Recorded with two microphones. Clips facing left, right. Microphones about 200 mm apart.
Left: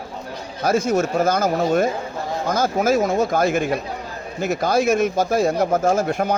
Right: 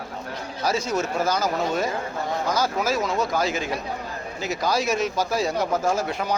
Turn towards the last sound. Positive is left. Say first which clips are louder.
# left 5 dB
turn(degrees=50)  # may be behind; listen again after turning